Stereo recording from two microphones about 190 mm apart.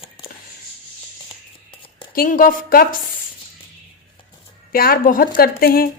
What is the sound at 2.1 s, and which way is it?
Speech, 50° left (ahead or behind).